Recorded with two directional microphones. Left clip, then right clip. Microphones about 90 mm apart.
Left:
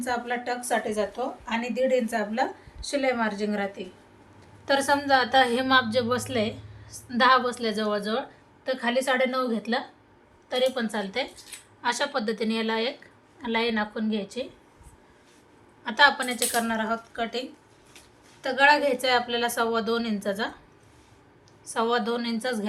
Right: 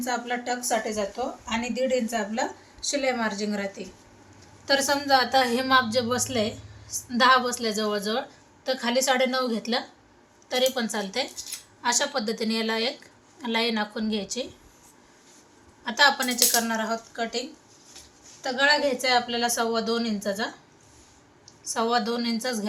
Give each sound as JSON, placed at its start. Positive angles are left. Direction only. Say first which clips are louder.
{"t": 0.0, "sound": "a woman's voice", "louder": "even", "side_deg": -10}
{"t": 0.9, "sound": "a woman's voice", "louder": "left 1 dB", "side_deg": 5}
{"t": 11.8, "sound": "a woman's voice", "louder": "right 1 dB", "side_deg": 5}
{"t": 15.8, "sound": "a woman's voice", "louder": "left 1 dB", "side_deg": 10}
{"t": 18.4, "sound": "a woman's voice", "louder": "left 2 dB", "side_deg": 55}
{"t": 21.7, "sound": "speech", "louder": "even", "side_deg": 20}